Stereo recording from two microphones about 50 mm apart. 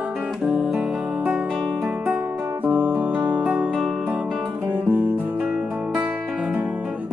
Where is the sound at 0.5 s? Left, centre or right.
Right.